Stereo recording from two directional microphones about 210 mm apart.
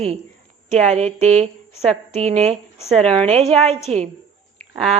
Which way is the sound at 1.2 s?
5° left (ahead or behind).